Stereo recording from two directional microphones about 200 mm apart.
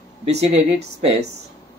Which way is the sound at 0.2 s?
30° right (ahead or behind).